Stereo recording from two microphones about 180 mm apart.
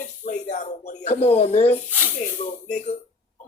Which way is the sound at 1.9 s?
10° right (ahead or behind).